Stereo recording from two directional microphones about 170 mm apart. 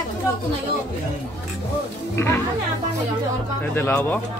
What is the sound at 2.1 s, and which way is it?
Speech, 15° left (ahead or behind).